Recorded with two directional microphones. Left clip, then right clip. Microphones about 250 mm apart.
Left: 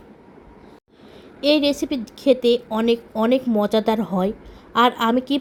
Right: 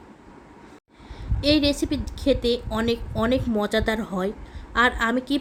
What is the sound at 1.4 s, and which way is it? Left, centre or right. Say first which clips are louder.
A woman's voice: left 3 dB; centre.